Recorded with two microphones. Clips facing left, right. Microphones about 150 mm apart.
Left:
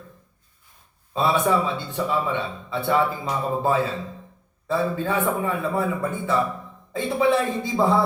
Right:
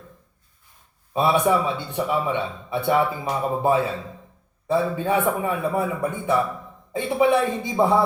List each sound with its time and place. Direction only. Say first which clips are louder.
1.1 s a man's voice: right 1 dB; 15° right (ahead or behind)